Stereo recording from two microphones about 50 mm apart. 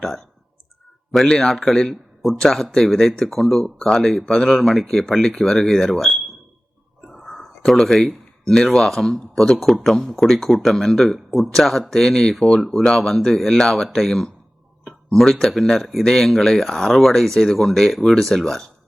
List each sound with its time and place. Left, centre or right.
0.0 s speech: centre
1.1 s speech: centre